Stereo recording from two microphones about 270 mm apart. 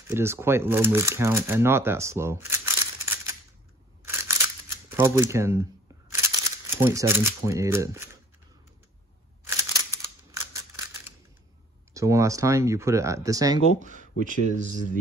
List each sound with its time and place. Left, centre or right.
0.1 s speech: centre
4.0 s scissors: centre
4.9 s speech: centre
10.3 s scissors: centre
11.9 s speech: centre
14.2 s speech: right